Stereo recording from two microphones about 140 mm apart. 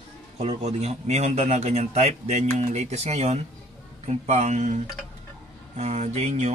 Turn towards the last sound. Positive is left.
turn(degrees=-55)  # may be behind; listen again after turning